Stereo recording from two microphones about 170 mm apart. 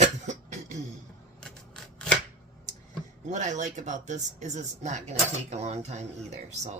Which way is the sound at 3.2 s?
45° right (ahead or behind).